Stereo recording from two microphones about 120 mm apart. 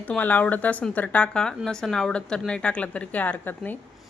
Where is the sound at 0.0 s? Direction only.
15° left (ahead or behind).